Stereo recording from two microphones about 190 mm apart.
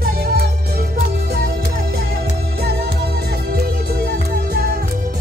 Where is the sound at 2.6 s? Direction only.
55° right (ahead or behind).